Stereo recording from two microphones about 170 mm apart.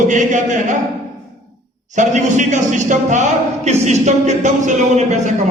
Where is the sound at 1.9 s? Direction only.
45° right (ahead or behind).